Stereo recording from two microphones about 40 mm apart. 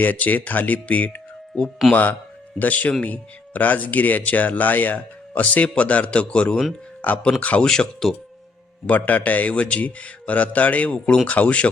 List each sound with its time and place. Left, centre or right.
0.0 s a man's voice: left; by 8.1 s centre
8.9 s speech: left